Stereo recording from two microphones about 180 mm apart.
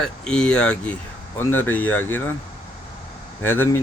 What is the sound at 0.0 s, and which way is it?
Speech, 5° left (ahead or behind).